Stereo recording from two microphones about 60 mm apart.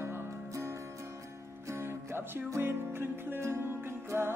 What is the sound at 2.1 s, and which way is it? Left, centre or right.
Music, right.